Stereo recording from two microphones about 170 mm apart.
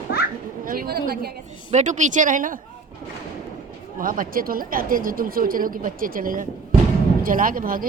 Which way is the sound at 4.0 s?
55° right (ahead or behind).